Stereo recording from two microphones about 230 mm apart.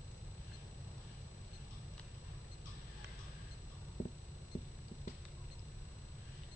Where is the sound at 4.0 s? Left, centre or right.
Left.